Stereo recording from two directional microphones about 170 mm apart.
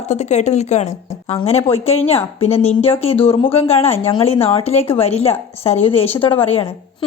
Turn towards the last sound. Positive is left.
turn(degrees=30)  # may be behind; listen again after turning